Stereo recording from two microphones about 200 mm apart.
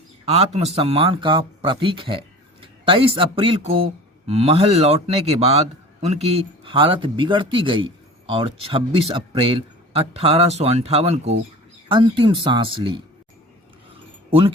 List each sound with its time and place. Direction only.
0.3 s a man's voice: 30° right (ahead or behind)
14.3 s speech: 25° right (ahead or behind)